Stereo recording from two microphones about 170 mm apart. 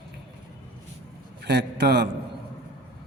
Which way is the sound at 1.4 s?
80° right.